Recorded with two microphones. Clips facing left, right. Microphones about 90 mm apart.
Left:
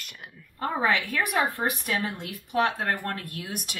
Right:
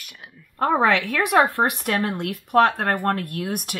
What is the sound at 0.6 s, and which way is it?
Speech, 75° right (ahead or behind).